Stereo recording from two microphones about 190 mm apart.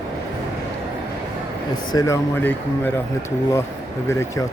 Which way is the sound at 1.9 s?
15° left (ahead or behind).